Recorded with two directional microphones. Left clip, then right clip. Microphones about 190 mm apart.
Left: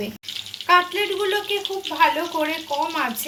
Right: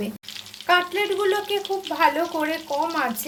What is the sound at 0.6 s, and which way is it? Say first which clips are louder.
Frying: left 3 dB; 45° right (ahead or behind).